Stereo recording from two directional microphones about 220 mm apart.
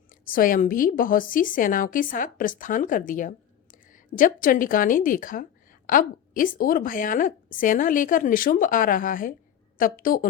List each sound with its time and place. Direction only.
0.1 s a woman's voice: 40° left (ahead or behind)